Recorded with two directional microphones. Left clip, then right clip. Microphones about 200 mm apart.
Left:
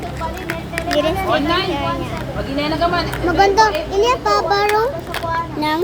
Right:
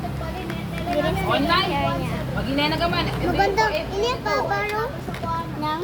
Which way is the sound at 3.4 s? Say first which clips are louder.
Left 8 dB; 35° left (ahead or behind).